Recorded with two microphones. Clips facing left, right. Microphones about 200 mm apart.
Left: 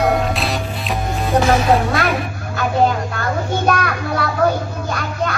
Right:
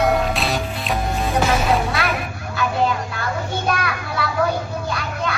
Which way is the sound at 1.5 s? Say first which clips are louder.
Left 4 dB; 50° left (ahead or behind).